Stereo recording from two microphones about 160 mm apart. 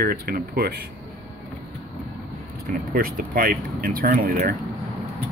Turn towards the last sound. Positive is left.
turn(degrees=-65)  # may be behind; listen again after turning